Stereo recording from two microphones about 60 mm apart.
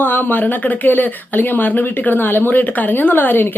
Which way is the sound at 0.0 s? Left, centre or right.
Left.